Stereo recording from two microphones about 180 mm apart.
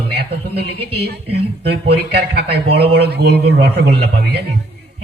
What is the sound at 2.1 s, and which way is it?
A man's voice, 65° right (ahead or behind).